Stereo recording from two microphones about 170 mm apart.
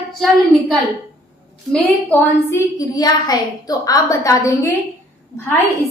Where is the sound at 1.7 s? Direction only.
10° left (ahead or behind).